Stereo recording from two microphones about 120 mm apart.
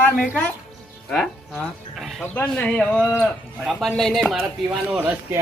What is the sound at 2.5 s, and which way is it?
Speech, 10° left (ahead or behind).